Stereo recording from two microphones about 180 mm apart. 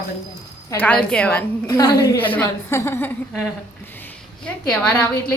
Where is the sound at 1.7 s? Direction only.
20° left (ahead or behind).